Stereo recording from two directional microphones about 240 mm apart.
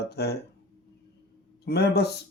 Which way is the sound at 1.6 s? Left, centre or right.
Left.